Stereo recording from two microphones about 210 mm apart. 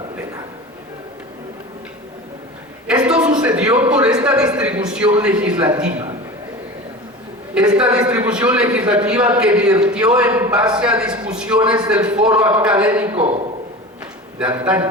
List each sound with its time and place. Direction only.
2.8 s a man's voice: 5° right (ahead or behind)
7.5 s a man's voice: 5° right (ahead or behind)
13.1 s a sound: 30° right (ahead or behind)
14.6 s speech: 5° right (ahead or behind)